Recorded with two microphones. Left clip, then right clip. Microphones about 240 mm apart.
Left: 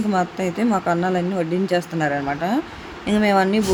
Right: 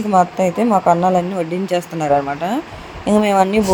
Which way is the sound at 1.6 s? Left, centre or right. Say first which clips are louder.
Right 3 dB; right.